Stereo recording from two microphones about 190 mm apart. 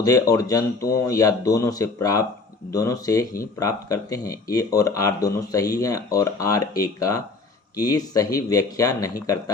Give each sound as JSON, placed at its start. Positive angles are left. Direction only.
{"t": 0.0, "sound": "speech", "side_deg": 20}